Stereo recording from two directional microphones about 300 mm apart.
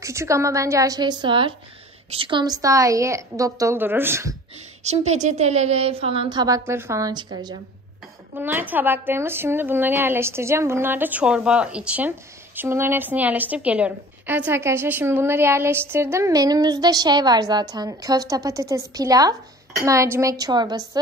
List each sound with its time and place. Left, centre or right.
0.0 s a woman's voice: centre
4.8 s a woman's voice: right